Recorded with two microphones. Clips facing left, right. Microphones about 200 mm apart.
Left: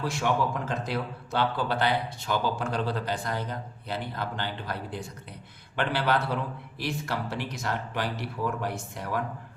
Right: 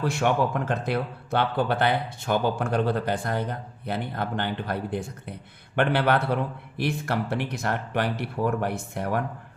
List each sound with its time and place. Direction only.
0.0 s a man's voice: 60° right (ahead or behind)